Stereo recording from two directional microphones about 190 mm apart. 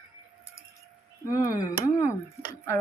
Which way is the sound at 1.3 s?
20° left (ahead or behind).